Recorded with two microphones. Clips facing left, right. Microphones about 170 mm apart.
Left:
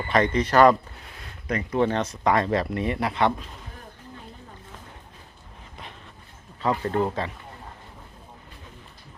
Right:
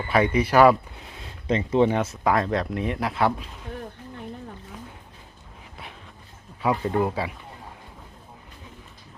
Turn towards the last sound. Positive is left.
turn(degrees=-10)  # may be behind; listen again after turning